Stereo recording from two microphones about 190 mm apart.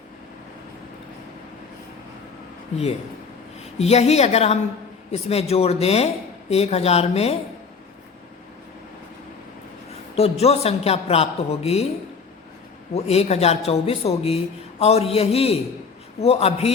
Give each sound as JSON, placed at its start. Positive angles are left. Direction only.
{"t": 3.8, "sound": "a man's voice", "side_deg": 35}
{"t": 10.2, "sound": "a man's voice", "side_deg": 35}
{"t": 12.9, "sound": "a man's voice", "side_deg": 35}